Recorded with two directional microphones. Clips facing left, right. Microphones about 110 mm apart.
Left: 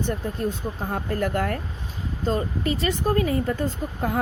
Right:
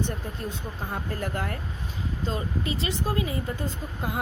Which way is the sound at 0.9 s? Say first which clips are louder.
Left 6 dB; 50° left (ahead or behind).